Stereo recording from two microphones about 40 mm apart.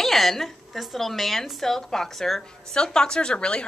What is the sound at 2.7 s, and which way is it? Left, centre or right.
Speech, centre.